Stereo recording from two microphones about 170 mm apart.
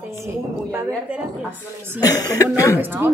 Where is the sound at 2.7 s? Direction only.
10° right (ahead or behind).